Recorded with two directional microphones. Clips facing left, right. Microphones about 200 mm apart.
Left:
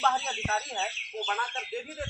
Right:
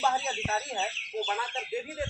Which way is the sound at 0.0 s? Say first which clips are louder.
Right 1 dB; 10° right (ahead or behind).